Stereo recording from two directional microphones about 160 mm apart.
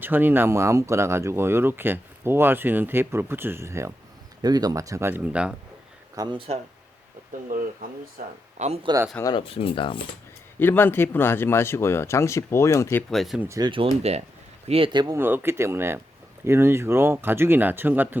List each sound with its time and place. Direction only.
0.0 s speech: 10° right (ahead or behind)
6.1 s speech: 30° right (ahead or behind)
7.4 s speech: 55° right (ahead or behind)
8.5 s a man's voice: 40° right (ahead or behind)
9.2 s speech: 30° left (ahead or behind)
10.6 s speech: 15° left (ahead or behind)
13.1 s speech: centre (ahead or behind)
13.5 s speech: 30° right (ahead or behind)
14.7 s speech: 30° right (ahead or behind)
15.2 s speech: 15° right (ahead or behind)